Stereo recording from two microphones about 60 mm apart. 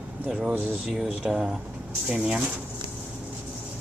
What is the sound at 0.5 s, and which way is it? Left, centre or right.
Speech, right.